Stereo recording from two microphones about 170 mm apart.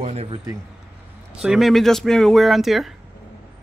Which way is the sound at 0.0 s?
40° right (ahead or behind).